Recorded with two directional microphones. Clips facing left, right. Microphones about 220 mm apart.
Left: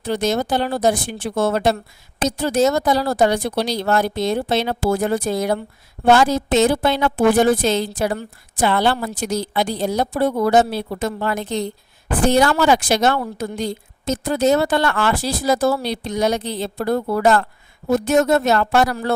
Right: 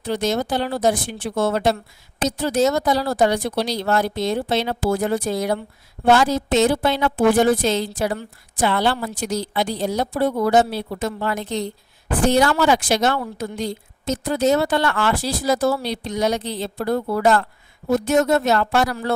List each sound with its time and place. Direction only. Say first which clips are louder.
0.0 s a woman's voice: left 2 dB; 50° left (ahead or behind)